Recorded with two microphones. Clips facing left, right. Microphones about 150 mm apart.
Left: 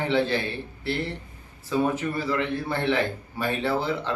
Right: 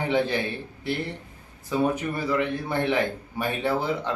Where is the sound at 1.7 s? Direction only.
15° right (ahead or behind).